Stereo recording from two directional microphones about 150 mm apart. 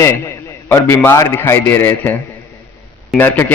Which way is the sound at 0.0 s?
20° left (ahead or behind).